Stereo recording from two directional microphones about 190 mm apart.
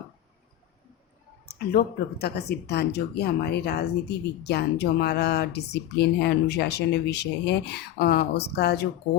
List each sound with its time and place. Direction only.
1.5 s speech: 55° left (ahead or behind)